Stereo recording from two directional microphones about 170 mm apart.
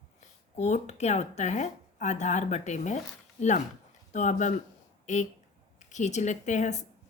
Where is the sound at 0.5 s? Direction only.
40° left (ahead or behind).